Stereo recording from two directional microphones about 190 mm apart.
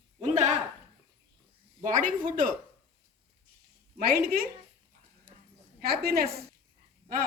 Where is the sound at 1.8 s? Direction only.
45° right (ahead or behind).